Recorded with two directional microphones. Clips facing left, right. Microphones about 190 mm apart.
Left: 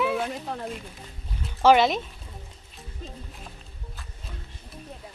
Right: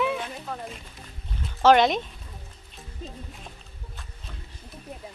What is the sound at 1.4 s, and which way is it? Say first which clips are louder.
Speech: even; 5° left (ahead or behind).